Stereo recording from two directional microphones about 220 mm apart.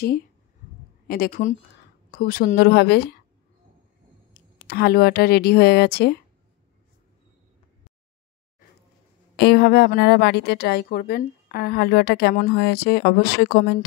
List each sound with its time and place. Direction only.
1.0 s a woman's voice: 40° left (ahead or behind)
4.3 s a woman's voice: 45° left (ahead or behind)
9.4 s a woman's voice: 45° left (ahead or behind)